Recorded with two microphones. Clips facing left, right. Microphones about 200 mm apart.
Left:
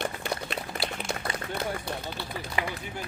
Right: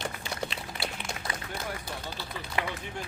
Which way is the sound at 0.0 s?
55° left (ahead or behind).